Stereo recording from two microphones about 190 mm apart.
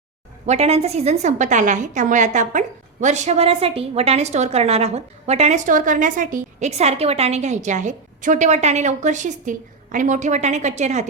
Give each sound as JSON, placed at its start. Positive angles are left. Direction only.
{"t": 0.4, "sound": "a woman's voice", "side_deg": -35}